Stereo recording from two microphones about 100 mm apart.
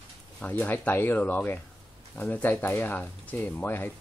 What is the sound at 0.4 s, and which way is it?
Speech, 15° left (ahead or behind).